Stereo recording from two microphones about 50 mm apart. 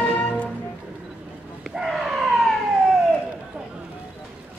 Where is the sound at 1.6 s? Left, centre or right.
Centre.